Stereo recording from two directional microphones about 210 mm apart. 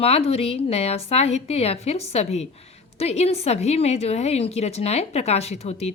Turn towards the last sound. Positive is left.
turn(degrees=30)  # may be behind; listen again after turning